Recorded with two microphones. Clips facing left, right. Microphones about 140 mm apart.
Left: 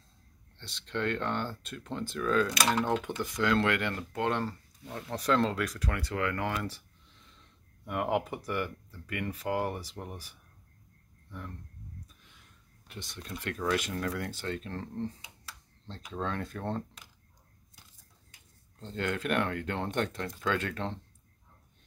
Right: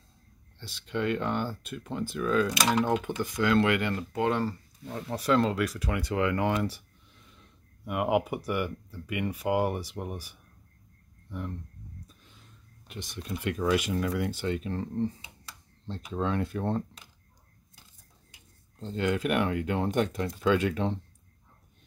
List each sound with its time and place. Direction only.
0.6 s speech: 5° right (ahead or behind)
7.8 s speech: 10° right (ahead or behind)
12.8 s speech: 15° right (ahead or behind)
18.8 s speech: 10° right (ahead or behind)